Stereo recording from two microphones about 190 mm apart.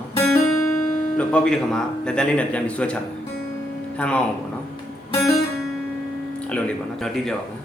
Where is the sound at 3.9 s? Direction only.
5° left (ahead or behind).